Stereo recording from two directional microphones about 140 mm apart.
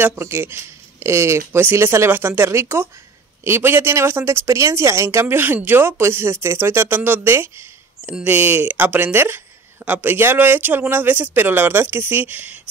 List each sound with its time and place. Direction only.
0.0 s a woman's voice: 15° right (ahead or behind)